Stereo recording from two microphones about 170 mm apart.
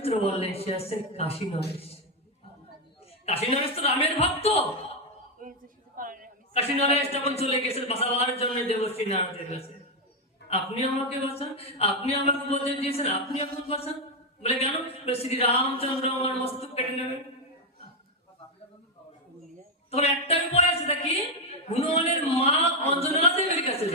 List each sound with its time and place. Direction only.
0.0 s speech: 35° left (ahead or behind)
3.2 s speech: 35° left (ahead or behind)
5.4 s a sound: 55° right (ahead or behind)
6.5 s speech: 35° left (ahead or behind)
19.9 s a woman's voice: 35° left (ahead or behind)